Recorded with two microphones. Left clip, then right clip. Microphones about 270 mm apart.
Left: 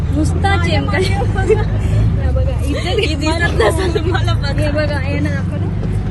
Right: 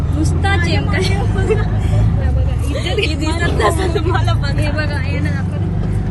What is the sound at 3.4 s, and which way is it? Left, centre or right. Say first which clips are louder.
Speech: left 1 dB; centre.